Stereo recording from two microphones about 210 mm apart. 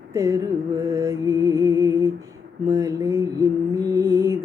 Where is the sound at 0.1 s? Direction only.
15° right (ahead or behind).